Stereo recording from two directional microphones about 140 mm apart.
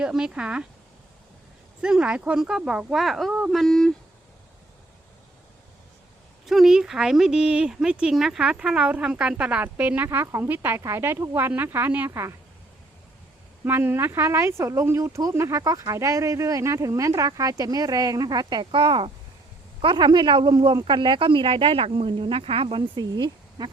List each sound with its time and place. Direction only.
0.0 s speech: 5° right (ahead or behind)
1.8 s speech: 5° right (ahead or behind)
6.4 s speech: centre (ahead or behind); by 12.3 s 15° right (ahead or behind)
13.7 s speech: 15° right (ahead or behind); by 23.6 s 30° right (ahead or behind)